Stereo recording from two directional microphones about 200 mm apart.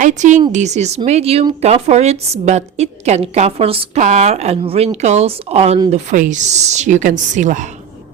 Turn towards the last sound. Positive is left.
turn(degrees=-40)  # may be behind; listen again after turning